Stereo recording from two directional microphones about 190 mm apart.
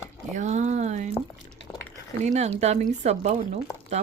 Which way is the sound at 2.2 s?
35° right (ahead or behind).